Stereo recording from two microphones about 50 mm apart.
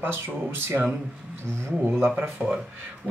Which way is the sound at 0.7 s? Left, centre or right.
Right.